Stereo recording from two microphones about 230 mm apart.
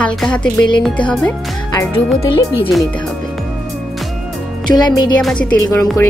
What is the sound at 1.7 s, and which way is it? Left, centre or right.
Speech, centre.